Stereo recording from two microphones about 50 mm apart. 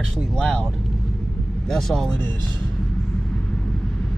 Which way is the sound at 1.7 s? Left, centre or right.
Centre.